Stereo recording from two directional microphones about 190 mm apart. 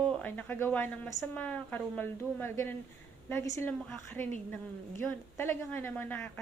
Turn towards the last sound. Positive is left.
turn(degrees=10)  # may be behind; listen again after turning